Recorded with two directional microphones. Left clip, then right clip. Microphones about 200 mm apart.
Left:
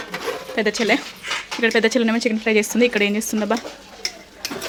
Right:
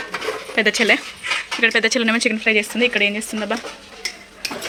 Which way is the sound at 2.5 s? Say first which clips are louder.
Even; 25° left (ahead or behind).